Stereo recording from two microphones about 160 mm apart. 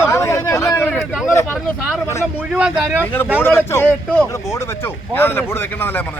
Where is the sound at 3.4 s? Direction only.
15° left (ahead or behind).